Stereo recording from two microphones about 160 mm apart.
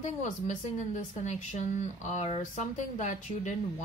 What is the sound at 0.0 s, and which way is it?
A woman's voice, 50° left (ahead or behind).